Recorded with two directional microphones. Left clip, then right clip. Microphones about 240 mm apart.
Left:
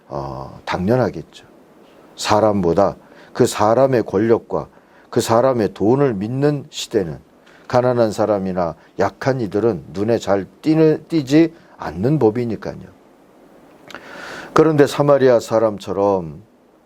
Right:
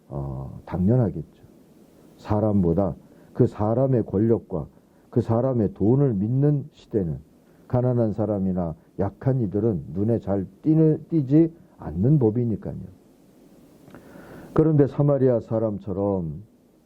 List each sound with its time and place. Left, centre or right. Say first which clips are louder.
0.1 s speech: left 9 dB; left
0.6 s speech: left 8 dB; centre
3.3 s speech: left 9 dB; centre; by 4.7 s left
5.1 s speech: left 9 dB; centre
13.8 s speech: left 13 dB; centre